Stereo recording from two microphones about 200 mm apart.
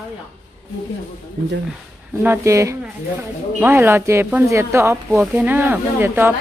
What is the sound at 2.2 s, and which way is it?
A woman's voice, 10° right (ahead or behind).